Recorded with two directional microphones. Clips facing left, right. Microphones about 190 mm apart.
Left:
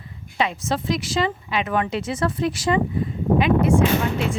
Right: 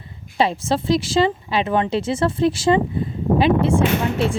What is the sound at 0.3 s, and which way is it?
Speech, 30° right (ahead or behind).